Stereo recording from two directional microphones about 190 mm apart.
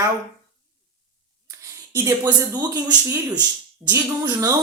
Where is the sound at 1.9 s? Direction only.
15° right (ahead or behind).